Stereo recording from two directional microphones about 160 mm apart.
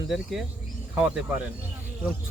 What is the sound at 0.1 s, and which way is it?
Speech, centre (ahead or behind).